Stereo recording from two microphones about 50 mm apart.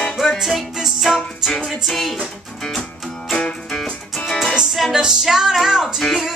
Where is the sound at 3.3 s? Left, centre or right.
Left.